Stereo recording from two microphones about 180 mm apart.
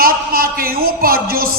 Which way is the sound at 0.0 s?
55° right (ahead or behind).